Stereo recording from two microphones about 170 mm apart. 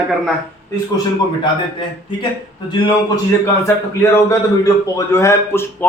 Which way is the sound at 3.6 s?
15° left (ahead or behind).